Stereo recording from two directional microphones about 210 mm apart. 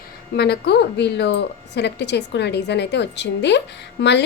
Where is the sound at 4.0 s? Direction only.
55° left (ahead or behind).